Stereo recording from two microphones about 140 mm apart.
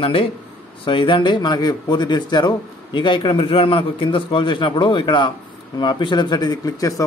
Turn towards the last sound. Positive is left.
turn(degrees=25)  # may be behind; listen again after turning